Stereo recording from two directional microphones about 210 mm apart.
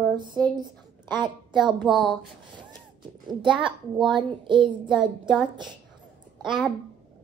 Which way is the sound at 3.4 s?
25° right (ahead or behind).